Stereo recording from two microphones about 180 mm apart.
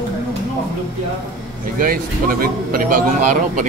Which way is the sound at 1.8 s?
55° right (ahead or behind).